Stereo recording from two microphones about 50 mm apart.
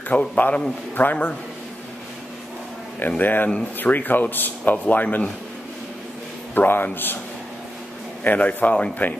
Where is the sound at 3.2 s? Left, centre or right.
Left.